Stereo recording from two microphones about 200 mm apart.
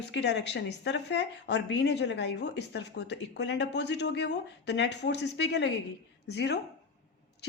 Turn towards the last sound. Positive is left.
turn(degrees=55)  # may be behind; listen again after turning